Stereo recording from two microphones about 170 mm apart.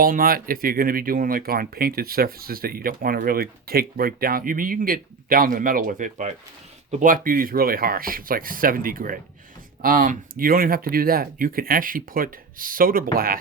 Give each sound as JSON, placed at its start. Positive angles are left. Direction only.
{"t": 0.0, "sound": "speech", "side_deg": -55}